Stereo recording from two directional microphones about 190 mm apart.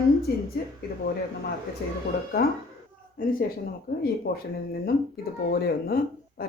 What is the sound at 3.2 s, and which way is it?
A woman's voice, 50° left (ahead or behind).